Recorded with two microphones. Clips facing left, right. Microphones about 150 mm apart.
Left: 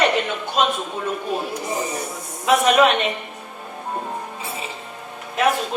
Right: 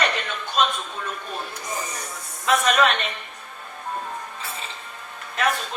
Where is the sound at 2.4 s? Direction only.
10° left (ahead or behind).